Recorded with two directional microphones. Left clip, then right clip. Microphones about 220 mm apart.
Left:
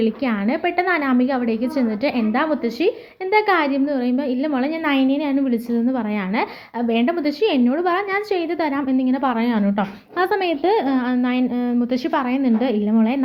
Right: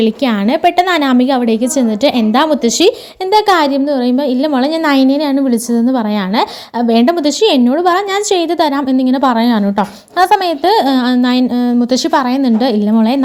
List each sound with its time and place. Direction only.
0.0 s a woman's voice: 40° right (ahead or behind)